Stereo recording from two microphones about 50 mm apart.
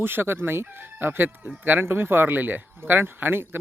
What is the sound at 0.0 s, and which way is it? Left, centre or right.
Speech, right.